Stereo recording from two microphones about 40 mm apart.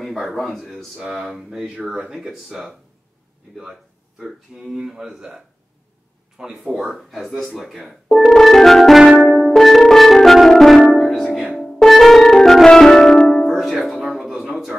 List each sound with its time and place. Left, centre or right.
0.0 s speech: centre
6.9 s speech: centre
8.3 s music: centre
14.2 s a sound: centre